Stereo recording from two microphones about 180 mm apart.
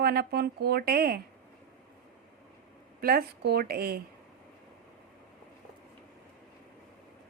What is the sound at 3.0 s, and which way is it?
Speech, 55° right (ahead or behind).